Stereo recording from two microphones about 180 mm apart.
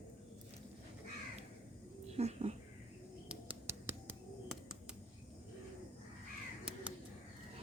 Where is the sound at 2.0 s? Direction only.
35° right (ahead or behind).